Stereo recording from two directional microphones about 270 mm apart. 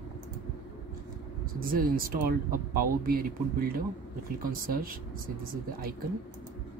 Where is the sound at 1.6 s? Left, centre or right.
Right.